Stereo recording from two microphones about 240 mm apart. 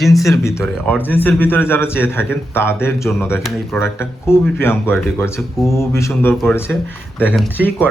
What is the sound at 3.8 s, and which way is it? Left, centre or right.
A man's voice, centre.